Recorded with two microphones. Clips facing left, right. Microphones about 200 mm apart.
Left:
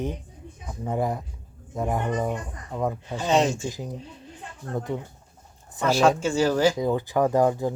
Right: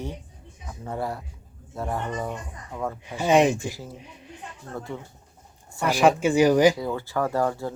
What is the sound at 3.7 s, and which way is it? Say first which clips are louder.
Speech: left 5 dB; 15° left (ahead or behind).